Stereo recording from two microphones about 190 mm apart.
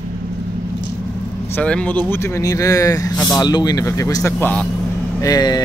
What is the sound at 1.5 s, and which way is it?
Speech, 5° left (ahead or behind).